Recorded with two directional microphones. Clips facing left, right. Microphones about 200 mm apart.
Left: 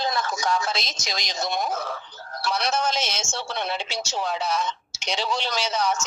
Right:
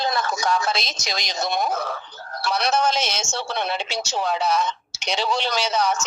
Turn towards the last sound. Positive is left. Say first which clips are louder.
# right 3 dB
turn(degrees=-65)  # may be behind; listen again after turning